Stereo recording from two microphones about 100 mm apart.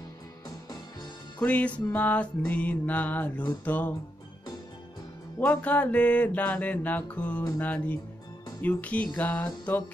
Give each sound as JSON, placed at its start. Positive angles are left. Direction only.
{"t": 1.4, "sound": "music", "side_deg": 15}
{"t": 5.5, "sound": "music", "side_deg": 15}